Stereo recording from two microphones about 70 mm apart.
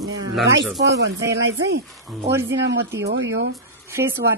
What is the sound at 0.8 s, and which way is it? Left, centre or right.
Speech, right.